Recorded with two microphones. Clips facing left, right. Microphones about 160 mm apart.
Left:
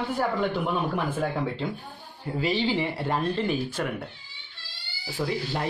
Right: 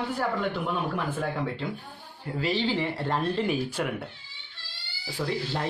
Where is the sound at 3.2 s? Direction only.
5° right (ahead or behind).